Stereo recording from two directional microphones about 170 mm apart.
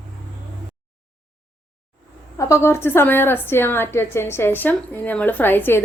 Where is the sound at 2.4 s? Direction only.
15° left (ahead or behind).